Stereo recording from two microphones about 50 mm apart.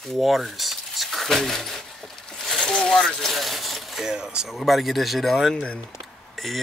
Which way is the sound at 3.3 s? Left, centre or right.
Centre.